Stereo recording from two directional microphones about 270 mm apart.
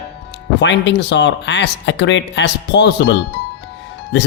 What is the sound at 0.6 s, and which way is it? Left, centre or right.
Speech, left.